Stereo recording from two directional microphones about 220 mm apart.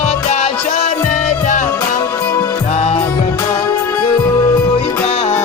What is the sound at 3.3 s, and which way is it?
Music, 15° left (ahead or behind).